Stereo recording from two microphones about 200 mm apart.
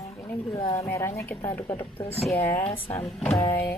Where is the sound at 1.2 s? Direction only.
15° left (ahead or behind).